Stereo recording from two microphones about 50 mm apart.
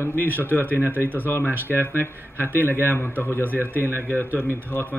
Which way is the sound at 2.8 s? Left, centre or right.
Left.